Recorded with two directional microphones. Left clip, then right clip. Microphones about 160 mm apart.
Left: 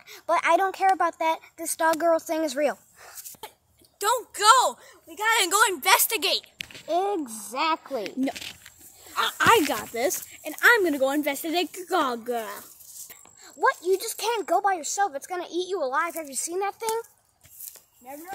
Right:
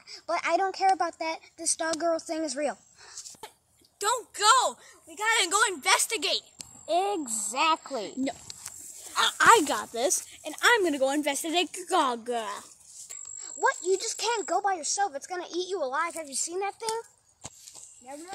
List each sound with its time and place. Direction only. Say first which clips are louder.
0.1 s a woman's voice: left 6 dB; 15° left (ahead or behind)
4.0 s speech: left 3 dB; centre (ahead or behind)
7.3 s a woman's voice: even; 15° right (ahead or behind)
9.1 s speech: even; 40° right (ahead or behind)
9.4 s speech: even; 5° left (ahead or behind)